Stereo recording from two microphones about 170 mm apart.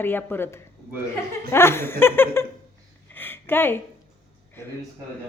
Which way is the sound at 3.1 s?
10° left (ahead or behind).